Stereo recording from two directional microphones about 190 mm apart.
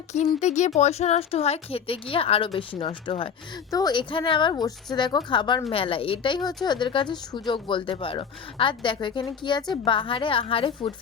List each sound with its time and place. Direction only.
0.3 s speech: 40° left (ahead or behind)